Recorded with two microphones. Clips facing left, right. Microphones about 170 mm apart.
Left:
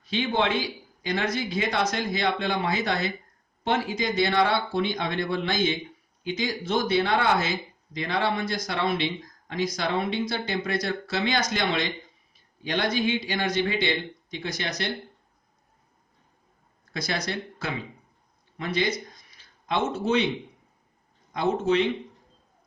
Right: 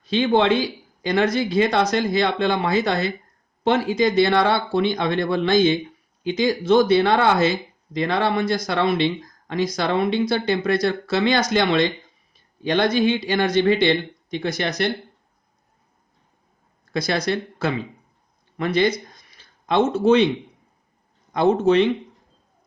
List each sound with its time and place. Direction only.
0.1 s speech: 75° right (ahead or behind)
12.6 s speech: 65° right (ahead or behind)
16.9 s speech: 70° right (ahead or behind)
21.3 s speech: 65° right (ahead or behind)